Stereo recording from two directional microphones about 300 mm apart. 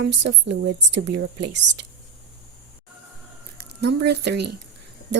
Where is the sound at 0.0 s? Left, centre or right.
Right.